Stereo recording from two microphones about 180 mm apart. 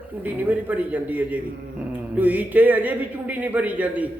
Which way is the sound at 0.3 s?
10° right (ahead or behind).